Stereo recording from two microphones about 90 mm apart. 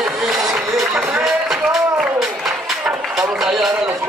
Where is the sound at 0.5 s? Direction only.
Centre (ahead or behind).